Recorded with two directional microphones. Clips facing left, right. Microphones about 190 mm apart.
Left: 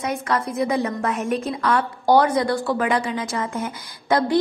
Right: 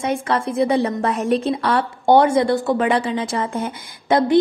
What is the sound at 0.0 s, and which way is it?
A woman's voice, 30° right (ahead or behind).